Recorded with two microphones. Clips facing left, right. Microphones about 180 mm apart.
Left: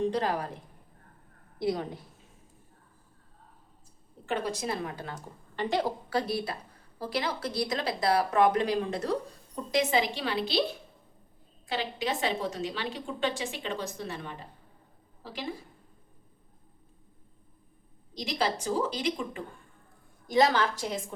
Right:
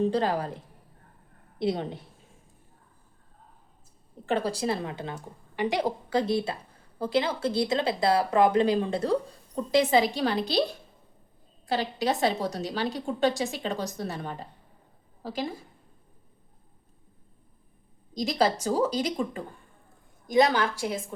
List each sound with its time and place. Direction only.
0.0 s a woman's voice: 30° right (ahead or behind)
1.5 s a woman's voice: 25° right (ahead or behind)
4.3 s a woman's voice: 35° right (ahead or behind)
5.1 s a woman's voice: 10° right (ahead or behind); by 10.6 s 45° right (ahead or behind)
11.7 s a woman's voice: 40° right (ahead or behind)
18.1 s a woman's voice: 40° right (ahead or behind)
20.2 s a woman's voice: 15° right (ahead or behind)